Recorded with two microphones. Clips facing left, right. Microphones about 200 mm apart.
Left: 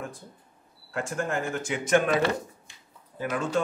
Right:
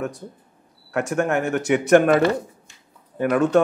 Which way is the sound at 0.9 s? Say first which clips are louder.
Right 8 dB; 70° right (ahead or behind).